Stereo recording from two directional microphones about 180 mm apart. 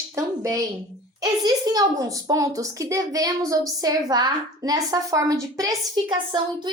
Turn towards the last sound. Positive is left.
turn(degrees=-25)  # may be behind; listen again after turning